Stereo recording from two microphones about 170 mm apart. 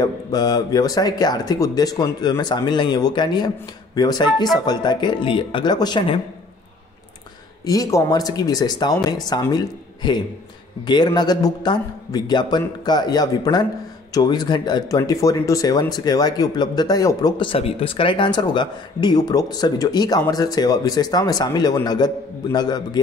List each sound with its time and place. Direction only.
0.0 s speech: 20° left (ahead or behind)
7.6 s speech: 20° left (ahead or behind)